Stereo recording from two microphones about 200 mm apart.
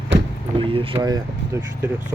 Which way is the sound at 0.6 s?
25° right (ahead or behind).